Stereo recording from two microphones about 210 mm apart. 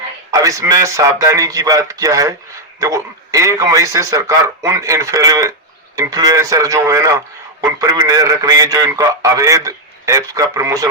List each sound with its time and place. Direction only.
0.3 s a man's voice: 15° right (ahead or behind)